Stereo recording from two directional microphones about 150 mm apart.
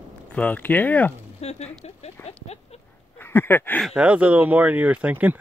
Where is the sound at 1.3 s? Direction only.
45° left (ahead or behind).